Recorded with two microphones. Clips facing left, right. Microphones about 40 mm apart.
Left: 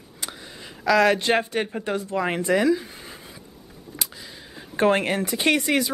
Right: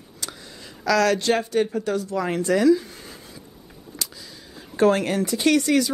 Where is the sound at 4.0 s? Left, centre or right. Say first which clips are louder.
Even; left.